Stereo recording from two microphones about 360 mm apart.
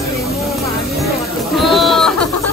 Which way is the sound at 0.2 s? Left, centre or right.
Centre.